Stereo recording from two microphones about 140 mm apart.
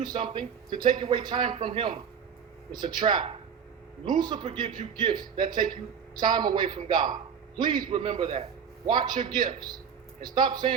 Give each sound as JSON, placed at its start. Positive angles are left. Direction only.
{"t": 0.0, "sound": "a man's voice", "side_deg": -30}